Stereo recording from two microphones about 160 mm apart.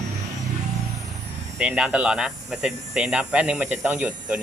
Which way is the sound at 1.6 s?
5° right (ahead or behind).